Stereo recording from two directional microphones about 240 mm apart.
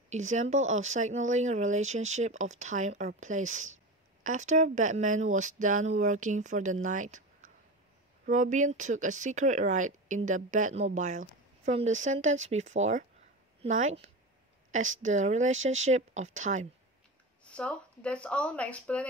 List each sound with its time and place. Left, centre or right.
0.1 s a woman's voice: right
17.4 s speech: centre